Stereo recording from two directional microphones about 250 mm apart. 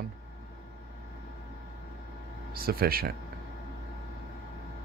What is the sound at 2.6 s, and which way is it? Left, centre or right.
Speech, right.